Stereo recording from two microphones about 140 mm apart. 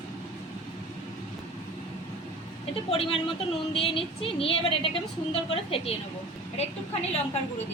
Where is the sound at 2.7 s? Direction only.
40° left (ahead or behind).